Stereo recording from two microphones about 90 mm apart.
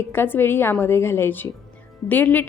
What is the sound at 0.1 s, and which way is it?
A woman's voice, 25° left (ahead or behind).